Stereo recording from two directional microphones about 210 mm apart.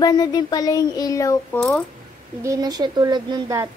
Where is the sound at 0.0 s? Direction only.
20° left (ahead or behind).